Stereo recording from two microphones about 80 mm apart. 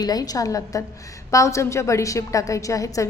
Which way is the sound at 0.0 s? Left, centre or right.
Left.